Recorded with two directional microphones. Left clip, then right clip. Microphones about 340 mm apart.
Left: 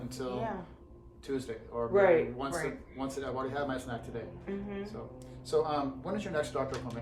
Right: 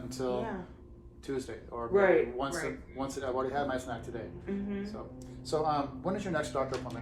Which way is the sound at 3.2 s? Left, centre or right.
Centre.